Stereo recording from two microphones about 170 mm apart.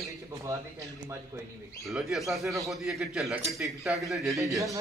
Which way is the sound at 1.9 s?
Centre (ahead or behind).